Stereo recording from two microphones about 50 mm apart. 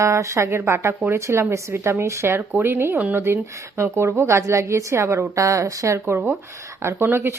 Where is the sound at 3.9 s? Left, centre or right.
Right.